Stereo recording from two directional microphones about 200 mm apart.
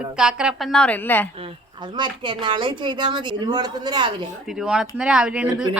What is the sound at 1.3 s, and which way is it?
Speech, 25° right (ahead or behind).